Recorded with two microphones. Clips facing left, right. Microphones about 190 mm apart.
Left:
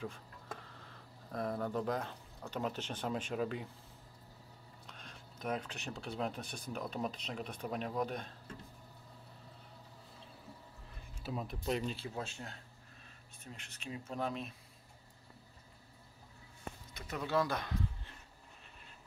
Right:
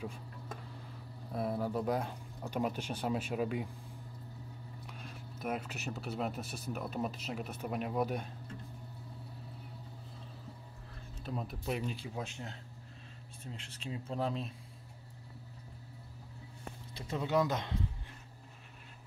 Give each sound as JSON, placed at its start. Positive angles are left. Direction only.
{"t": 1.3, "sound": "speech", "side_deg": -5}
{"t": 4.8, "sound": "speech", "side_deg": -10}
{"t": 11.2, "sound": "speech", "side_deg": 0}
{"t": 13.4, "sound": "speech", "side_deg": -30}
{"t": 16.9, "sound": "speech", "side_deg": -25}